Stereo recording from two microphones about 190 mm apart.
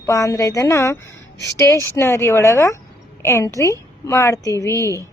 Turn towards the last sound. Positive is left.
turn(degrees=15)  # may be behind; listen again after turning